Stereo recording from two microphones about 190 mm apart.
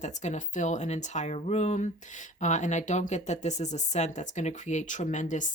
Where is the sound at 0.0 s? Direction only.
40° left (ahead or behind).